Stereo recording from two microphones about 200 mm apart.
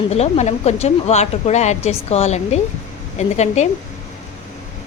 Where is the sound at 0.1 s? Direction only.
35° left (ahead or behind).